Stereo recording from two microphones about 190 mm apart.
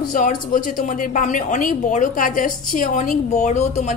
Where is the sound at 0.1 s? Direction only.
45° left (ahead or behind).